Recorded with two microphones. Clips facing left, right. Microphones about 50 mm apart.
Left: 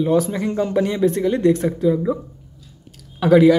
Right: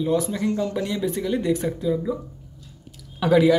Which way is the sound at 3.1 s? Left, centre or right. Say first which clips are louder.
Left 5 dB; centre.